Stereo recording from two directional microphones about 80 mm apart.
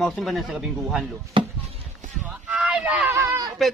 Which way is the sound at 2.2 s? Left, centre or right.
Centre.